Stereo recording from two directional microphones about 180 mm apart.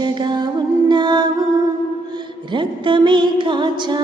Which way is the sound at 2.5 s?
25° right (ahead or behind).